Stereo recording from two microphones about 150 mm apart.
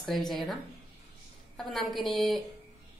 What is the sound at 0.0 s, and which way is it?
Speech, centre (ahead or behind).